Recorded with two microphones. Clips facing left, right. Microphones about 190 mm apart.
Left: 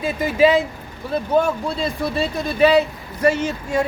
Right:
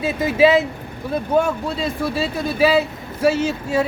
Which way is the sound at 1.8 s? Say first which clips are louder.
Even; 5° right (ahead or behind).